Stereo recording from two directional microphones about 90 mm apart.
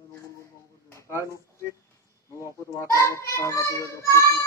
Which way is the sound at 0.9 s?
30° left (ahead or behind).